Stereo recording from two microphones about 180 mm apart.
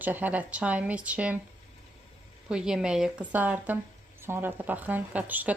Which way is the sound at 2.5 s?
5° right (ahead or behind).